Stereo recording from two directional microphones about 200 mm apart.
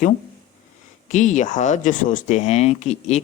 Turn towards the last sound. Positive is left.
turn(degrees=35)  # may be behind; listen again after turning